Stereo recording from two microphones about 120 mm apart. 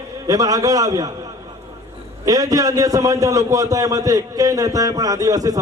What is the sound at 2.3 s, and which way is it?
A man's voice, 30° right (ahead or behind).